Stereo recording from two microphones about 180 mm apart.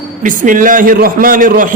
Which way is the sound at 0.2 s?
45° right (ahead or behind).